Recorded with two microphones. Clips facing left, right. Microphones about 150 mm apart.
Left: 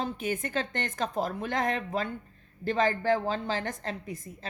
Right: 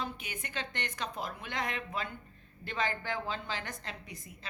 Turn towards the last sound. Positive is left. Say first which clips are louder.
# left 9 dB
turn(degrees=45)  # may be behind; listen again after turning